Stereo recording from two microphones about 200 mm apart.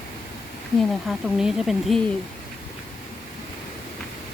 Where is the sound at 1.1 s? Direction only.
5° right (ahead or behind).